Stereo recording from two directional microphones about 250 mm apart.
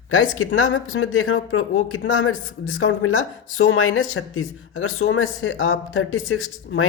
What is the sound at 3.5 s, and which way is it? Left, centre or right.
Speech, left.